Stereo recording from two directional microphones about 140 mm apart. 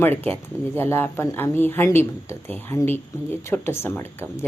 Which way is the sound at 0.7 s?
15° left (ahead or behind).